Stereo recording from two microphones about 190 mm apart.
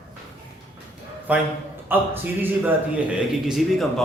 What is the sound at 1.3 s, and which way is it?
A man's voice, 10° right (ahead or behind).